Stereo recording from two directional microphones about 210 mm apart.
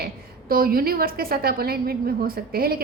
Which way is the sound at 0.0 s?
45° right (ahead or behind).